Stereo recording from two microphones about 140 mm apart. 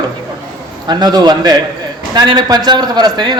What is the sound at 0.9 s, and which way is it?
A man's voice, 30° right (ahead or behind).